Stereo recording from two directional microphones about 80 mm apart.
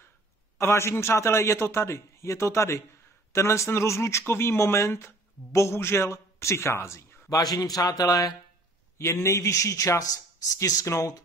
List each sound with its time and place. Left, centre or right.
0.6 s speech: left
7.2 s a man's voice: left
8.9 s speech: left